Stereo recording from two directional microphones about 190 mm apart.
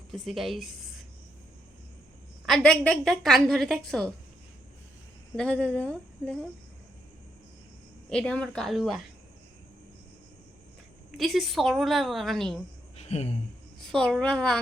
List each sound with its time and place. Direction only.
0.1 s a woman's voice: centre (ahead or behind)
2.5 s a woman's voice: 5° left (ahead or behind)
5.4 s speech: 5° left (ahead or behind)
8.1 s a woman's voice: 5° left (ahead or behind)
11.2 s a woman's voice: centre (ahead or behind)
13.0 s a sound: 35° left (ahead or behind)
13.9 s a woman's voice: 5° left (ahead or behind)